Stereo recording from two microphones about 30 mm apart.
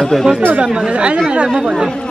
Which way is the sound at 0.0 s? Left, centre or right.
Centre.